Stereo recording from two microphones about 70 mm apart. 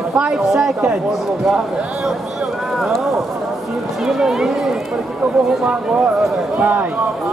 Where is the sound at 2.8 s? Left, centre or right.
Centre.